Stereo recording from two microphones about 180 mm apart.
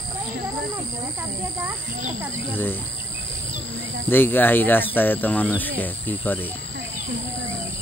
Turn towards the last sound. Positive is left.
turn(degrees=10)  # may be behind; listen again after turning